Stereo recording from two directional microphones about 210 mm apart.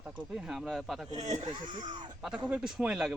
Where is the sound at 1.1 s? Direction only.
20° right (ahead or behind).